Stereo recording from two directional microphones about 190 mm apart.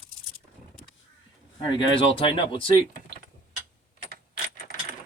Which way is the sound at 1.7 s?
25° left (ahead or behind).